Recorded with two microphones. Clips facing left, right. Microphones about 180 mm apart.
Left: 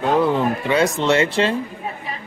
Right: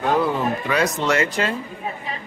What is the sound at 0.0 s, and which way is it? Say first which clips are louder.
Speech: left 3 dB; 25° left (ahead or behind).